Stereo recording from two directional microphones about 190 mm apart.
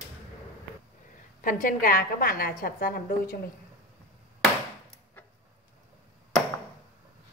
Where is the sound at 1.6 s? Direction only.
45° left (ahead or behind).